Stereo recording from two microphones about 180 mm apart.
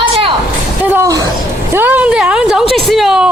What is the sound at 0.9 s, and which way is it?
A woman's voice, 15° right (ahead or behind).